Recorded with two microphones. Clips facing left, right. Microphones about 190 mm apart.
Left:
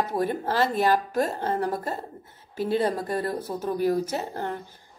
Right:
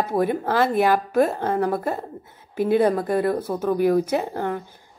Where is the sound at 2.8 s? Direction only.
55° right (ahead or behind).